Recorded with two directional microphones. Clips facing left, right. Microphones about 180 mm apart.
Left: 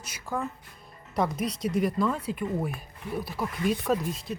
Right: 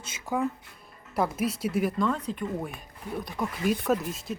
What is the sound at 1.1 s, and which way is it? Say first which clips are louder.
Speech: right 1 dB; 5° right (ahead or behind).